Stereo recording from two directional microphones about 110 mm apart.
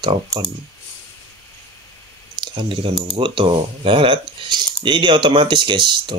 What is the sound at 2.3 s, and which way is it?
Speech, 45° right (ahead or behind).